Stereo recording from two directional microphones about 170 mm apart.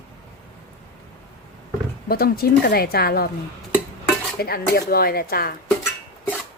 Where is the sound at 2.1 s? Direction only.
65° left (ahead or behind).